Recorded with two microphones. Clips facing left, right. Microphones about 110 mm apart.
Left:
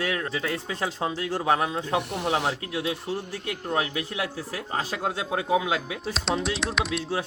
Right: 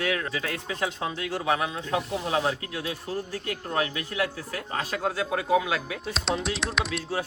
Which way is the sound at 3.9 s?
25° left (ahead or behind).